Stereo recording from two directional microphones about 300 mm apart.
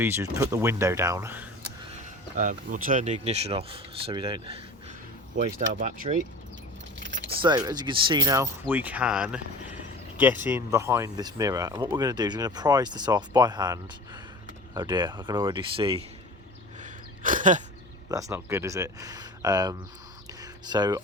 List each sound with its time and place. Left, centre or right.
0.0 s speech: centre
2.3 s speech: right
5.8 s speech: right
7.3 s speech: centre
16.8 s gasp: right
18.1 s speech: centre
20.4 s a sound: centre